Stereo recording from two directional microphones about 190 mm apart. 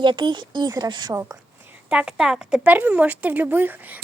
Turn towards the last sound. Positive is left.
turn(degrees=-10)  # may be behind; listen again after turning